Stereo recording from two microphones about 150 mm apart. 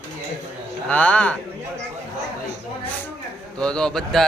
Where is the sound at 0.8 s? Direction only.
10° left (ahead or behind).